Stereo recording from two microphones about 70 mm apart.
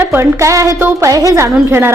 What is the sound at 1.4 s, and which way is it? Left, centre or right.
Speech, right.